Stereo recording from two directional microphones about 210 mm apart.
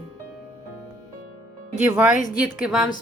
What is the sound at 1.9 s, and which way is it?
Speech, 10° right (ahead or behind).